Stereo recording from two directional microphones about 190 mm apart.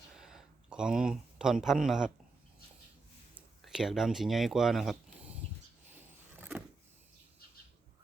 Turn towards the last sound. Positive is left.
turn(degrees=-10)  # may be behind; listen again after turning